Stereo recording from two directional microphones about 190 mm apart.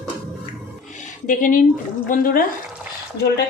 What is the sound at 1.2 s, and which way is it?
A woman's voice, 45° left (ahead or behind).